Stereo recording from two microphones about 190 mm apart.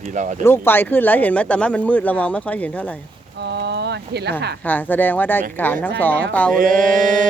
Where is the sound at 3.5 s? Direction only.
60° right (ahead or behind).